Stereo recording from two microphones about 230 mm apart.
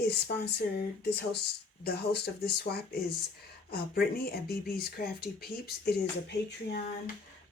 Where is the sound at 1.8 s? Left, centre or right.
Left.